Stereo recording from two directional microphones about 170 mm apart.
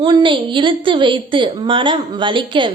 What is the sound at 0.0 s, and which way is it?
A woman's voice, 30° right (ahead or behind).